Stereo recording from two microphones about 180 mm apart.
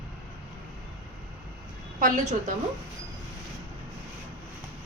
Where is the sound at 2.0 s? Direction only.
45° right (ahead or behind).